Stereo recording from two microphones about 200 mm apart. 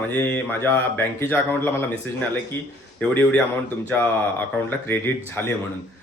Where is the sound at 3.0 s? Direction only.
5° left (ahead or behind).